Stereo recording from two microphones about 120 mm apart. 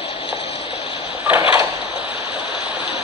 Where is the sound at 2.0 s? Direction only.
15° right (ahead or behind).